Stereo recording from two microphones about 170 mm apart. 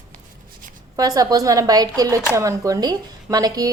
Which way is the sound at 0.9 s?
20° right (ahead or behind).